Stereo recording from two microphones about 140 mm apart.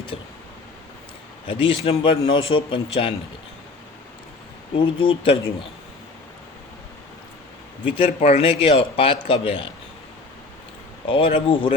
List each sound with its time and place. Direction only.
0.1 s a man's voice: 40° left (ahead or behind)
1.5 s a man's voice: 40° left (ahead or behind)
4.8 s a man's voice: 35° left (ahead or behind)
7.9 s a man's voice: 40° left (ahead or behind)
11.1 s a man's voice: 40° left (ahead or behind)